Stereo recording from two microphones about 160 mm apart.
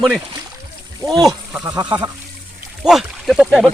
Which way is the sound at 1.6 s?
25° right (ahead or behind).